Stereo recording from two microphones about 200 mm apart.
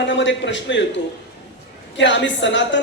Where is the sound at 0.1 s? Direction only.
65° left (ahead or behind).